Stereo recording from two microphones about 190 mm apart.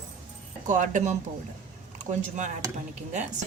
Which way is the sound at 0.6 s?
40° right (ahead or behind).